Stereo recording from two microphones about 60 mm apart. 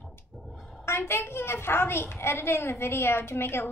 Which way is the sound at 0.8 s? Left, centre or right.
Left.